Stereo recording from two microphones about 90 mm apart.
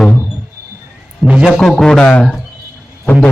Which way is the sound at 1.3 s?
10° right (ahead or behind).